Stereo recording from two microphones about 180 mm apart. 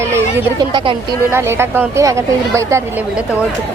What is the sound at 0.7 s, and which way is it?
Speech, 30° right (ahead or behind).